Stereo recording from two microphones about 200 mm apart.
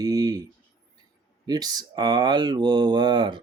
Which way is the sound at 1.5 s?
20° right (ahead or behind).